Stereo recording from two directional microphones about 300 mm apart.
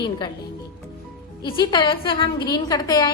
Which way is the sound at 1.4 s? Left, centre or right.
Centre.